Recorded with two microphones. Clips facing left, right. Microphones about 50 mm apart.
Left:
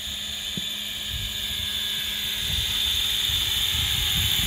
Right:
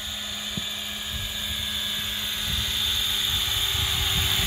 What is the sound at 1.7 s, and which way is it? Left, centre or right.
Helicopter, right.